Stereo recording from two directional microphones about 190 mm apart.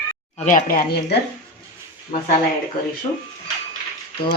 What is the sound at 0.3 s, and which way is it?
Speech, 40° left (ahead or behind).